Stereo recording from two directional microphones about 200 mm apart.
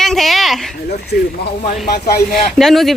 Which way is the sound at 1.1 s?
50° left (ahead or behind).